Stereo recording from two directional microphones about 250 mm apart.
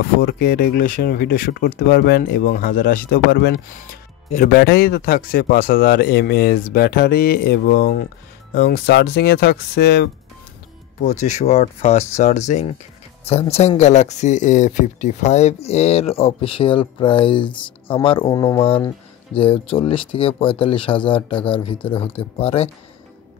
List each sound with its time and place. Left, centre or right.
0.0 s speech: left
11.0 s speech: left